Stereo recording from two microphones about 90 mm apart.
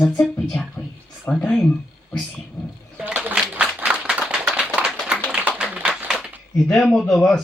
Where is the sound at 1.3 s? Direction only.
20° left (ahead or behind).